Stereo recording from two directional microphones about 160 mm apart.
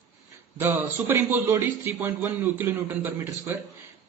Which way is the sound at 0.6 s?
15° right (ahead or behind).